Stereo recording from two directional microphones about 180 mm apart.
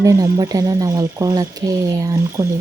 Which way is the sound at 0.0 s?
20° right (ahead or behind).